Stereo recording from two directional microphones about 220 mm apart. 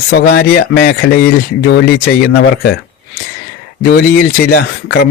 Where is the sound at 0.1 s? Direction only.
45° left (ahead or behind).